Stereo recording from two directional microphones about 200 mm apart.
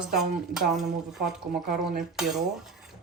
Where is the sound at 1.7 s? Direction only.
45° right (ahead or behind).